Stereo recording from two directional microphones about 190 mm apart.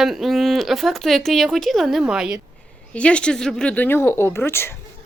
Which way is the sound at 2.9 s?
5° left (ahead or behind).